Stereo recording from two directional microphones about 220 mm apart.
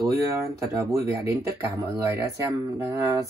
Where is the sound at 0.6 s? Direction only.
15° right (ahead or behind).